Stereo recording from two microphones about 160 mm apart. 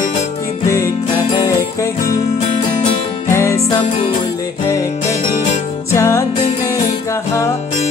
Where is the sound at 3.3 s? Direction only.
15° left (ahead or behind).